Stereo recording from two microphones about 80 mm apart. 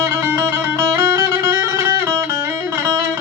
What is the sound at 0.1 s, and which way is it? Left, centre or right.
Music, right.